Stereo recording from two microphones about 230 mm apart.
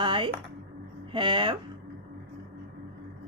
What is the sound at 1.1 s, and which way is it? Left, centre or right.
Speech, right.